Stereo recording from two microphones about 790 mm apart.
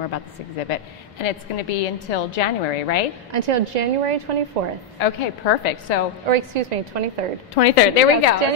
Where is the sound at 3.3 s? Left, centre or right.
Right.